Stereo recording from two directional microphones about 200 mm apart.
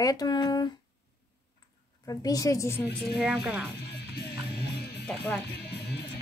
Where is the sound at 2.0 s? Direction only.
15° left (ahead or behind).